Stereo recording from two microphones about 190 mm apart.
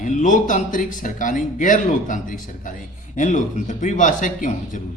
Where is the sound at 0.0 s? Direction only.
40° left (ahead or behind).